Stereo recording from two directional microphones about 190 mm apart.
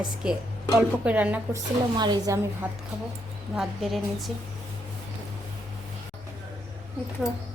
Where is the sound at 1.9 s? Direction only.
20° right (ahead or behind).